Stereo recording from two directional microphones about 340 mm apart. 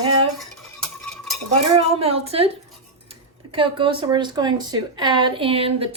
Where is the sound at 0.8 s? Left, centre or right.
Centre.